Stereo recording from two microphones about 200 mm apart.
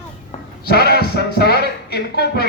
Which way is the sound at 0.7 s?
50° left (ahead or behind).